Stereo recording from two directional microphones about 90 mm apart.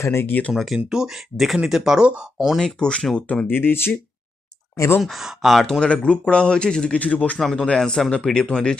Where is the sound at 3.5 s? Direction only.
25° left (ahead or behind).